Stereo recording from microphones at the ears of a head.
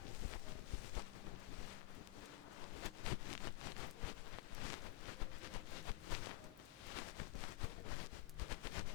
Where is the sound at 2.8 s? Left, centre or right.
Left.